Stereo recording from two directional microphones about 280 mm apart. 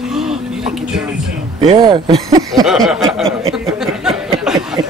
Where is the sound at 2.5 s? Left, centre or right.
Centre.